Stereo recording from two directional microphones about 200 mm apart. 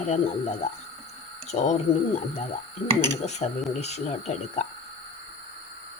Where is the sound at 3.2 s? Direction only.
35° left (ahead or behind).